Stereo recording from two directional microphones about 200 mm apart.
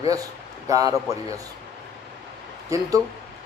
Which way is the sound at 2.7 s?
15° right (ahead or behind).